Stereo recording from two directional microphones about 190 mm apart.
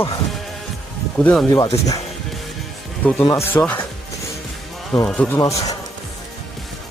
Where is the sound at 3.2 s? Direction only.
15° left (ahead or behind).